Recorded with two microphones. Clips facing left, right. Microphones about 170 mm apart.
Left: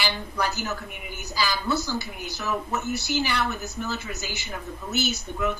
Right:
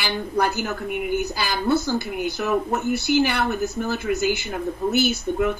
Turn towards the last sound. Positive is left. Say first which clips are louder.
# right 6 dB
turn(degrees=-55)  # may be behind; listen again after turning